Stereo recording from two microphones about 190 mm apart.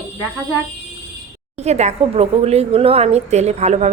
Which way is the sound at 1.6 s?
35° right (ahead or behind).